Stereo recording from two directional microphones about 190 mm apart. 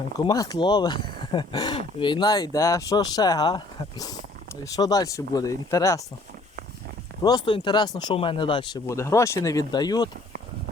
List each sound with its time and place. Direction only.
0.3 s speech: 20° left (ahead or behind)
7.2 s speech: 20° left (ahead or behind)